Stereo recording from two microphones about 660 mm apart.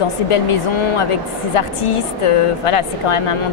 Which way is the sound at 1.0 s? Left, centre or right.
Left.